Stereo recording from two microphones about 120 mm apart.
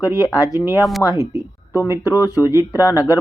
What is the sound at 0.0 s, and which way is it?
Speech, 30° left (ahead or behind).